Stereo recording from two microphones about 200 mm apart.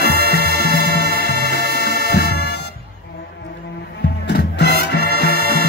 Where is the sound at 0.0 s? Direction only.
55° left (ahead or behind).